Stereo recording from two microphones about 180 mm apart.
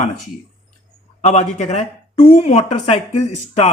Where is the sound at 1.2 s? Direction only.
40° left (ahead or behind).